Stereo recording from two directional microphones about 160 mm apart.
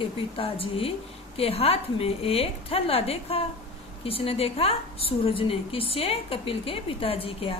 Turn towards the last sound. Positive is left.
turn(degrees=35)  # may be behind; listen again after turning